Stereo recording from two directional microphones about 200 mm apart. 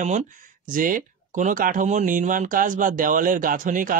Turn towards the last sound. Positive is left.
turn(degrees=-45)  # may be behind; listen again after turning